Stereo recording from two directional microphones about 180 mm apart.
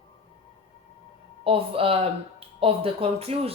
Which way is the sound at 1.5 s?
30° right (ahead or behind).